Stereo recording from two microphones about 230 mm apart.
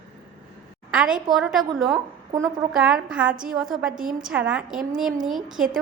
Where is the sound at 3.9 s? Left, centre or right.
Right.